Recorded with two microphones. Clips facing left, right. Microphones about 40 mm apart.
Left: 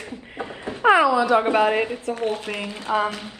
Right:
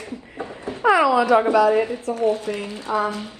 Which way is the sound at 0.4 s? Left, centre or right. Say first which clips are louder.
Left 1 dB; left.